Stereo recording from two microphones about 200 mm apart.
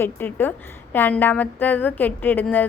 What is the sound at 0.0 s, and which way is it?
A woman's voice, 10° left (ahead or behind).